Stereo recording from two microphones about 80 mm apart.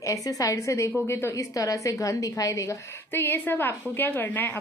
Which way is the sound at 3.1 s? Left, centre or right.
Left.